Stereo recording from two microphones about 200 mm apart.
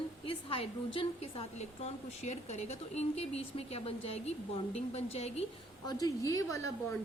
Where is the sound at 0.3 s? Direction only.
25° left (ahead or behind).